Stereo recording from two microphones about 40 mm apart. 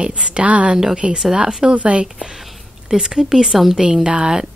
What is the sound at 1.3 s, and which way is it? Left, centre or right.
Speech, centre.